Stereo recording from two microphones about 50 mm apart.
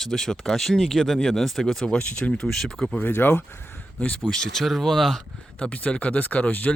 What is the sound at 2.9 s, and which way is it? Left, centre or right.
Speech, left.